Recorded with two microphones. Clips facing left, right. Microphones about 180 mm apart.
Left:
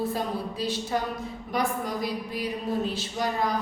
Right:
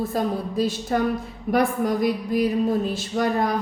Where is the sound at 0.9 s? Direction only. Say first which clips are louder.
Right 6 dB; 55° right (ahead or behind).